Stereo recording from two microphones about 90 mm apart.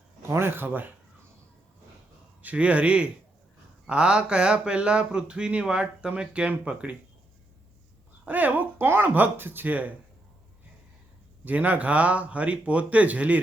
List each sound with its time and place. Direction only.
0.2 s speech: 30° right (ahead or behind)
2.4 s speech: 15° right (ahead or behind)
8.2 s speech: 20° right (ahead or behind)
11.4 s speech: 15° right (ahead or behind)